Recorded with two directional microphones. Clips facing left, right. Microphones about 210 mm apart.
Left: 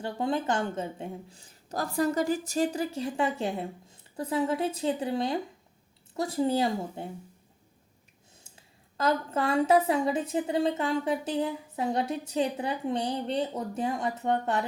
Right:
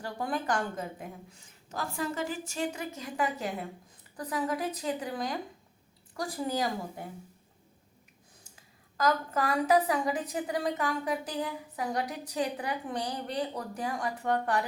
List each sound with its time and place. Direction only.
0.0 s a woman's voice: 25° left (ahead or behind)
9.0 s a woman's voice: 25° left (ahead or behind)